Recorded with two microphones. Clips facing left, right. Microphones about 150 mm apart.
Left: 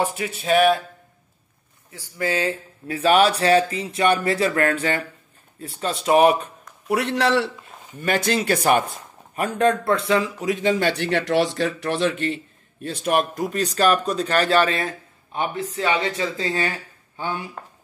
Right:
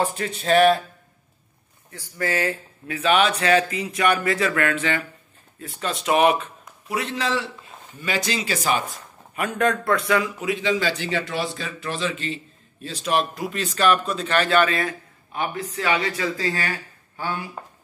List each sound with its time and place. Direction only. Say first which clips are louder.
0.0 s speech: even; 10° left (ahead or behind)
1.9 s speech: left 1 dB; 15° left (ahead or behind)
2.9 s speech: left 3 dB; 40° left (ahead or behind)
6.9 s speech: left 5 dB; 70° left (ahead or behind)
8.0 s speech: left 5 dB; 55° left (ahead or behind)
9.3 s speech: left 3 dB; 35° left (ahead or behind)
10.5 s a man's voice: left 3 dB; 50° left (ahead or behind); by 17.5 s 20° left (ahead or behind)